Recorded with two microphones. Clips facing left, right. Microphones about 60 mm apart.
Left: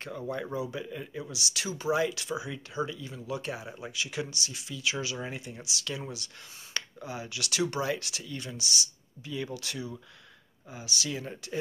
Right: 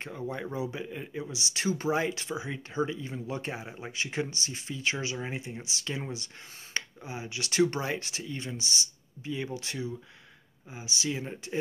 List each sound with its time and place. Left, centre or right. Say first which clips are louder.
0.0 s speech: left 1 dB; right